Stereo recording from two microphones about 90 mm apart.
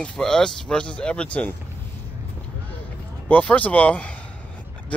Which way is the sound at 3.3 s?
15° left (ahead or behind).